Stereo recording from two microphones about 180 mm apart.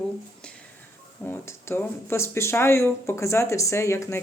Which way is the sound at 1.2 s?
15° left (ahead or behind).